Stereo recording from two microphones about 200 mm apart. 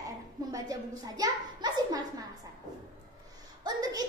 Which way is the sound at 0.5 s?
15° right (ahead or behind).